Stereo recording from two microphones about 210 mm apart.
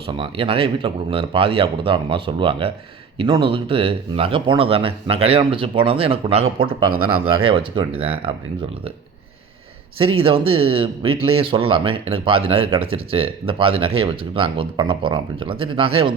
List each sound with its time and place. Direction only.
0.1 s speech: 25° right (ahead or behind)
10.2 s speech: 25° right (ahead or behind)